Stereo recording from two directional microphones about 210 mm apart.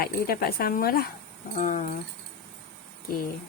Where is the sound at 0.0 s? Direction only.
45° left (ahead or behind).